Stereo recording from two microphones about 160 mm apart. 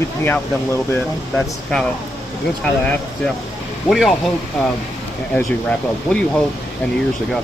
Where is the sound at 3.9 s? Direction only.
Centre (ahead or behind).